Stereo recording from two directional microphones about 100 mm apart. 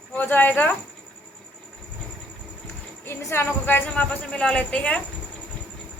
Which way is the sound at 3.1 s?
20° left (ahead or behind).